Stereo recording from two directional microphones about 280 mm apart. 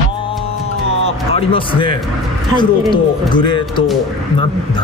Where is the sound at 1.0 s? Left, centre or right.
Centre.